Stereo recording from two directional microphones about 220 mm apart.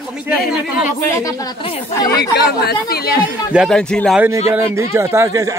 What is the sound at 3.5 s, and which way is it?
Speech, centre (ahead or behind).